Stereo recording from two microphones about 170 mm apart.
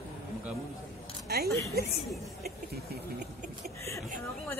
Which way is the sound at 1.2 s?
65° right (ahead or behind).